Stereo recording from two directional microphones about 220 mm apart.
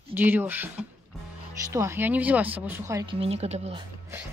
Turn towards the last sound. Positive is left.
turn(degrees=-25)  # may be behind; listen again after turning